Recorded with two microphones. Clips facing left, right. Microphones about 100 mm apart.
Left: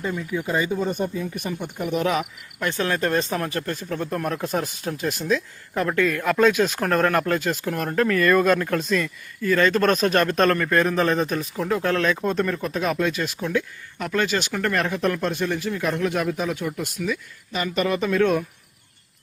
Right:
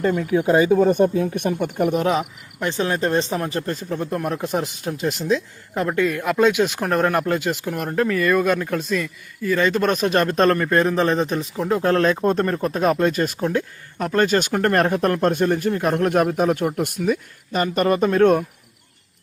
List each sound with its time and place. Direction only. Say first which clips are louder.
0.0 s speech: right 8 dB; 55° right (ahead or behind)
0.9 s speech: right 8 dB; 50° right (ahead or behind)
2.0 s speech: right 2 dB; 30° right (ahead or behind); by 10.1 s 10° right (ahead or behind)
10.1 s speech: right 2 dB; 25° right (ahead or behind); by 17.0 s 55° right (ahead or behind)
17.1 s speech: right 6 dB; 45° right (ahead or behind)